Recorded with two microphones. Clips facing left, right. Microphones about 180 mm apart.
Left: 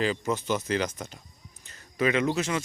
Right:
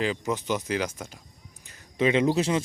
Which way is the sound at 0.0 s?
15° right (ahead or behind).